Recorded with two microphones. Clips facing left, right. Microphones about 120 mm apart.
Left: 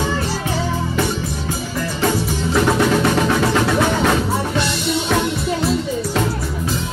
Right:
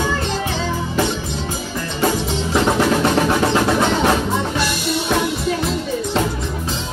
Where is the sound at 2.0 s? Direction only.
20° right (ahead or behind).